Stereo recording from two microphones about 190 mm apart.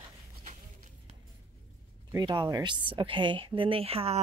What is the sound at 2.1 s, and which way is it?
A woman's voice, 20° right (ahead or behind).